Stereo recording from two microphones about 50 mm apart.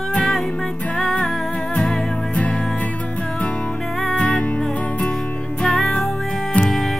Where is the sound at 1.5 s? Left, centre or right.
Centre.